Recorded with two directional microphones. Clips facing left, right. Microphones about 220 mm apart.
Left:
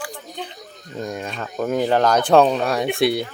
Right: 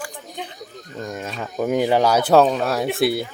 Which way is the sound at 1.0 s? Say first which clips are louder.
Left 1 dB; centre (ahead or behind).